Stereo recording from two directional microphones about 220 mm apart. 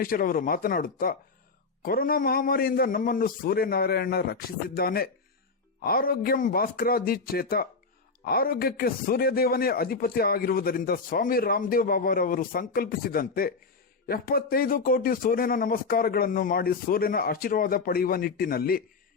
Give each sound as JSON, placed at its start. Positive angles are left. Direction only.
{"t": 0.0, "sound": "a man's voice", "side_deg": 40}